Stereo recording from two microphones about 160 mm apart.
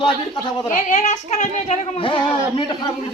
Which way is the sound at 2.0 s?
30° left (ahead or behind).